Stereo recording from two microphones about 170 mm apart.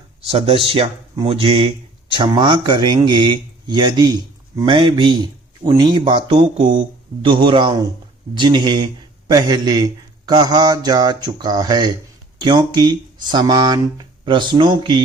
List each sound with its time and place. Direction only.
0.3 s a man's voice: 35° right (ahead or behind)